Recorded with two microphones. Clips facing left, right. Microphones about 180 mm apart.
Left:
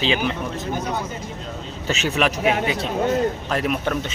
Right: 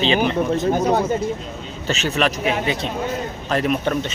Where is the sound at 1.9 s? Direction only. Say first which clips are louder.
Right 1 dB; 10° left (ahead or behind).